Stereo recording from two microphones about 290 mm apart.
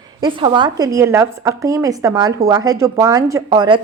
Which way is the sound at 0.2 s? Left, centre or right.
Centre.